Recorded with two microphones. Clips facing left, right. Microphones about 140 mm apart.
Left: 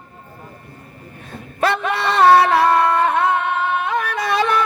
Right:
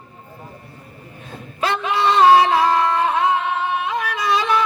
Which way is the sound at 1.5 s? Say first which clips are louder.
Left 1 dB; 55° left (ahead or behind).